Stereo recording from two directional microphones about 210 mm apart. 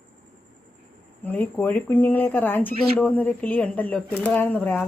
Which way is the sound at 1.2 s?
10° left (ahead or behind).